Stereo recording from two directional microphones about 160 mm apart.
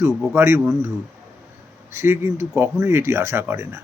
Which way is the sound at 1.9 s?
15° right (ahead or behind).